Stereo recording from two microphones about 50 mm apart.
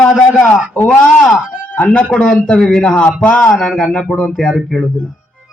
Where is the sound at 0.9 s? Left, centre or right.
Centre.